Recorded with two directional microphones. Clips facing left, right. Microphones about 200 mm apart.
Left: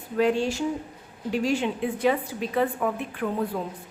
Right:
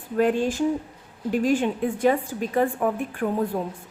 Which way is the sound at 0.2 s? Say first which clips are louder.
Right 2 dB; 50° right (ahead or behind).